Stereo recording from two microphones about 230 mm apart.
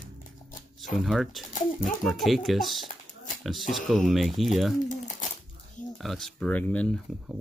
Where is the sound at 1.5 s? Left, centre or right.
Left.